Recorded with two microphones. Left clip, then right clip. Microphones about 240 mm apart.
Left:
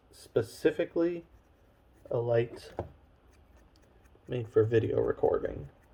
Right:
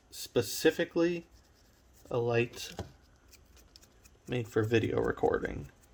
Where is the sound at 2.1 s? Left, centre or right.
Right.